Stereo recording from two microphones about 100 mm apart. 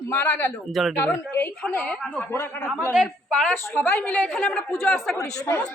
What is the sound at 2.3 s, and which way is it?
Speech, 25° left (ahead or behind).